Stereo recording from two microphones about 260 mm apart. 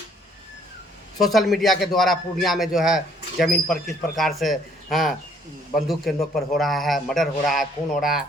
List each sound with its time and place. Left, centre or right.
1.2 s a man's voice: centre